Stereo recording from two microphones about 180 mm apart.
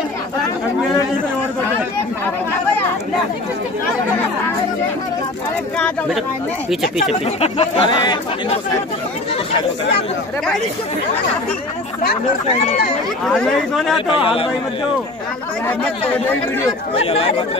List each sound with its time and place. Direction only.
5.8 s speech: centre (ahead or behind)
7.0 s speech: 35° left (ahead or behind)
13.2 s speech: centre (ahead or behind)
14.1 s a man's voice: 30° left (ahead or behind)
16.9 s speech: 30° left (ahead or behind)